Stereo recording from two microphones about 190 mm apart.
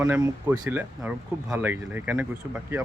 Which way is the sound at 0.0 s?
20° right (ahead or behind).